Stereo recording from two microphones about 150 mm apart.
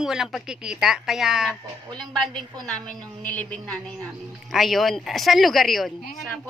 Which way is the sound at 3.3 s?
5° left (ahead or behind).